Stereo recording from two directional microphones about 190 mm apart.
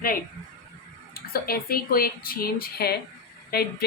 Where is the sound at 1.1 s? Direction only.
50° left (ahead or behind).